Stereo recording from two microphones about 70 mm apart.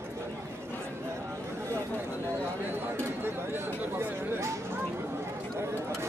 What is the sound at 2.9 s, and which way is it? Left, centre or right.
Speech, right.